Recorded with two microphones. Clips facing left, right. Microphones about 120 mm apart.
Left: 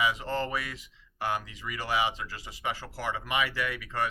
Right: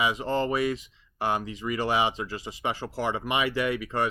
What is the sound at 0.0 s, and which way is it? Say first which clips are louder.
Speech: right 3 dB; 20° right (ahead or behind).